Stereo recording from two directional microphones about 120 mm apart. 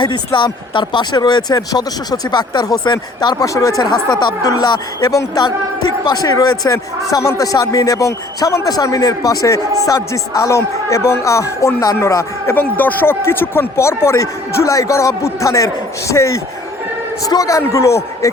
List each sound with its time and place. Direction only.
0.0 s a man's voice: 40° left (ahead or behind); by 18.3 s 25° left (ahead or behind)